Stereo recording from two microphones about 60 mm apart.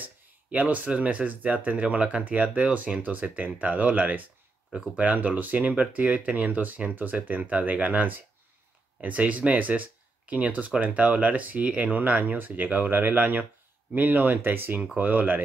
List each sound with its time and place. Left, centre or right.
0.0 s speech: right